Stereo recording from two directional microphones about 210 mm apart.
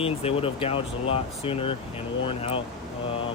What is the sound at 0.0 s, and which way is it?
Speech, 30° left (ahead or behind).